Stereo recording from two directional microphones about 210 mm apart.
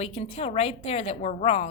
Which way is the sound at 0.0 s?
30° left (ahead or behind).